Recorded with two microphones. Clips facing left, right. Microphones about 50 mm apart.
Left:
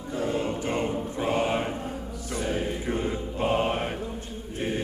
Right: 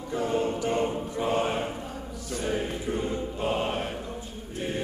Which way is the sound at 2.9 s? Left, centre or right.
Left.